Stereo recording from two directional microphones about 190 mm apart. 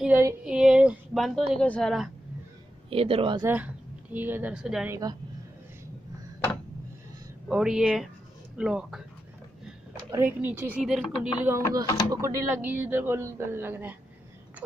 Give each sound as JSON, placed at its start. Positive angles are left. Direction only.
{"t": 0.0, "sound": "speech", "side_deg": -10}
{"t": 2.9, "sound": "speech", "side_deg": -30}
{"t": 3.4, "sound": "a woman's voice", "side_deg": -10}
{"t": 7.4, "sound": "speech", "side_deg": -5}
{"t": 9.9, "sound": "a woman's voice", "side_deg": -15}